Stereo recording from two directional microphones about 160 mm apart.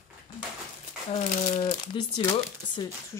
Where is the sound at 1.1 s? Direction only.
45° left (ahead or behind).